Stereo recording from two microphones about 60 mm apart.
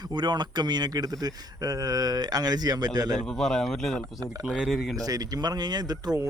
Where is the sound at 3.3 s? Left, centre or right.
Centre.